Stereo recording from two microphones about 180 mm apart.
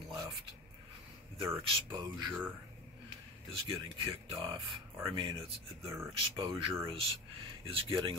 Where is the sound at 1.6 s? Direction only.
30° right (ahead or behind).